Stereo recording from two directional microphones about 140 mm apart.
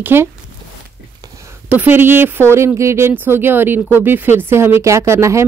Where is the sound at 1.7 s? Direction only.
15° right (ahead or behind).